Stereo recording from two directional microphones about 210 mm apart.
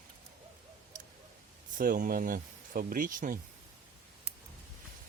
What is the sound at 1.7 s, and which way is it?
Speech, 40° right (ahead or behind).